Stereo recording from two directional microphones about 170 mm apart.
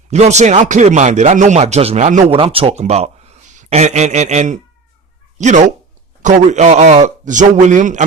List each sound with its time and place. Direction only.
0.1 s a man's voice: 40° right (ahead or behind)